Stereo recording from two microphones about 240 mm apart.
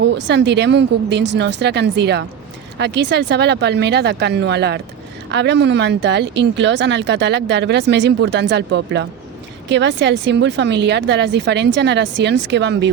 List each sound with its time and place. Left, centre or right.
0.0 s speech: right